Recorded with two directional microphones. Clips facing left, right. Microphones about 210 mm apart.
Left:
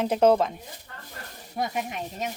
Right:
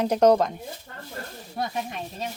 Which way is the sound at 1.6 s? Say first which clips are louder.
Left 1 dB; 15° left (ahead or behind).